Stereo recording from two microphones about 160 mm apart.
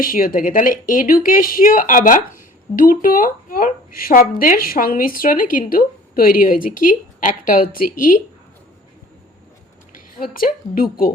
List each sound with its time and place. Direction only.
0.0 s speech: 60° left (ahead or behind)
10.3 s speech: 65° left (ahead or behind)